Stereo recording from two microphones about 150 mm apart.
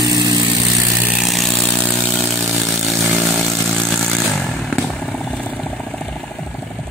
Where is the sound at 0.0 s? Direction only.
25° right (ahead or behind).